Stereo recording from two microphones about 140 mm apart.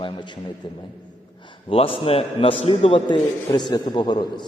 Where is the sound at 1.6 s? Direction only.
40° left (ahead or behind).